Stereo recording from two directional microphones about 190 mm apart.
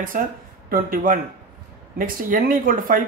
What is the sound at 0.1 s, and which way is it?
Speech, 45° right (ahead or behind).